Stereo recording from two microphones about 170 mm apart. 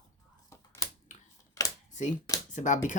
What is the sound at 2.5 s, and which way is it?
Speech, 45° left (ahead or behind).